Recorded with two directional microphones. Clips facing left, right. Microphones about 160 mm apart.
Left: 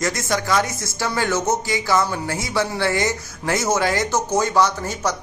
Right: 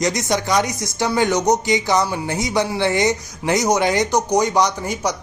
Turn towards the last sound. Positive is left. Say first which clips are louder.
# right 1 dB
turn(degrees=-15)  # may be behind; listen again after turning